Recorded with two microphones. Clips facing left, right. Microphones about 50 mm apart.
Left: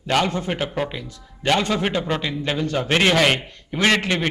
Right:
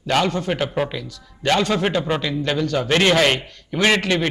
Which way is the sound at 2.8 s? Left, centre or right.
Centre.